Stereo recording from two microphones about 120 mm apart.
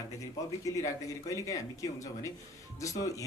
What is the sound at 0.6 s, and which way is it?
A man's voice, 30° left (ahead or behind).